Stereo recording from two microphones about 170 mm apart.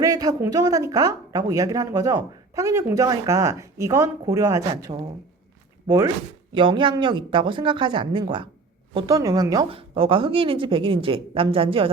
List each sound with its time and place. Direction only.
0.0 s speech: 20° right (ahead or behind)
6.5 s speech: 30° right (ahead or behind)